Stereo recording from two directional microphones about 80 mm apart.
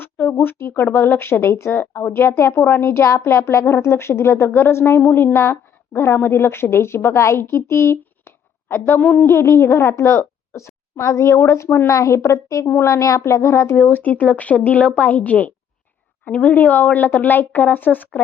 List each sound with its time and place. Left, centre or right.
0.0 s a sound: left
0.4 s a woman's voice: left
9.2 s a woman's voice: left
12.6 s speech: left
12.9 s a woman's voice: left
13.7 s speech: centre